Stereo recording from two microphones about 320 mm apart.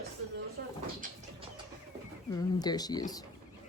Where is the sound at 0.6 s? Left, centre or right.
Right.